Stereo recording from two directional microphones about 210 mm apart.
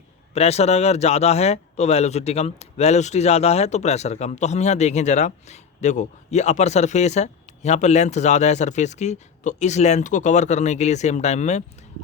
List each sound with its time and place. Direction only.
0.3 s speech: 30° left (ahead or behind)